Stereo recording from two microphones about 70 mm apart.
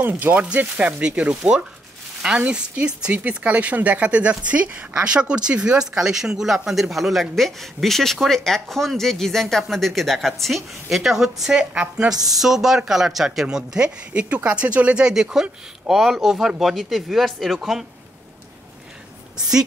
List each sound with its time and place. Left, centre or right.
0.0 s speech: right; by 17.8 s centre